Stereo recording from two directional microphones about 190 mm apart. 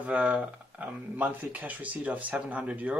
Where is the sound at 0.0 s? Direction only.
5° right (ahead or behind).